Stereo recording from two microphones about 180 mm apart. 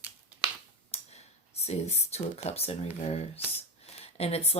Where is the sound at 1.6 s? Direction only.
35° left (ahead or behind).